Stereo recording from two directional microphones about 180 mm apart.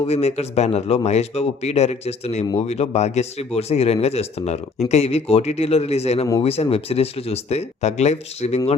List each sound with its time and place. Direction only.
0.0 s speech: 35° left (ahead or behind)